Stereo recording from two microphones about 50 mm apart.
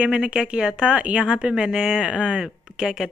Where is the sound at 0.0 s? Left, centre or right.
Centre.